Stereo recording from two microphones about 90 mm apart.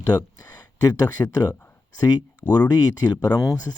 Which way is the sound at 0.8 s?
45° left (ahead or behind).